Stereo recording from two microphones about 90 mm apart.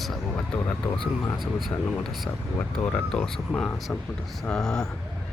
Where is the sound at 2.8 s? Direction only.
20° left (ahead or behind).